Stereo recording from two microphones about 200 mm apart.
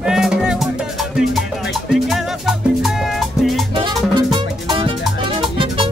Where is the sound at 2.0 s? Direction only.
Centre (ahead or behind).